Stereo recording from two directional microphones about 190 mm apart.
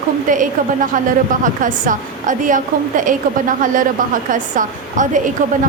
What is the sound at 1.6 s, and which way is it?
A woman's voice, 45° right (ahead or behind).